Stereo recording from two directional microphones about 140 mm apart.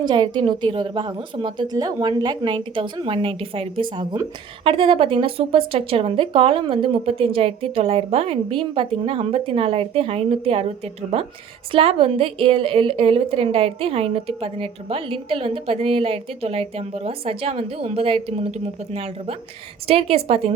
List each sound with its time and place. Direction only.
0.0 s a woman's voice: 30° right (ahead or behind)
11.7 s a woman's voice: 45° right (ahead or behind)